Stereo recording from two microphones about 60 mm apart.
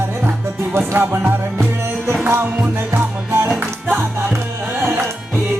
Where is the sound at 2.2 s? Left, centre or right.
Right.